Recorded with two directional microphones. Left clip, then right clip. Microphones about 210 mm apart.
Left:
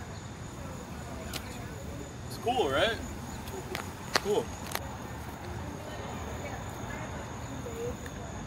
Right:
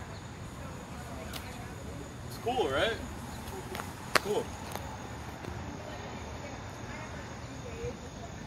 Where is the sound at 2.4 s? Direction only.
25° left (ahead or behind).